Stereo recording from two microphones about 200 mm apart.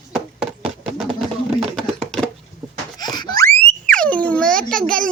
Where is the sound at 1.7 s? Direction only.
5° left (ahead or behind).